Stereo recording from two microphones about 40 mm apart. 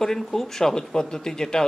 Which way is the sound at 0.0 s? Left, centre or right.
Centre.